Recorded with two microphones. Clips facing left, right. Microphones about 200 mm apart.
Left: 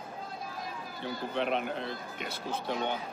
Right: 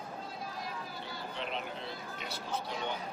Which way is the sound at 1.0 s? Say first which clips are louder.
Left 11 dB; 55° left (ahead or behind).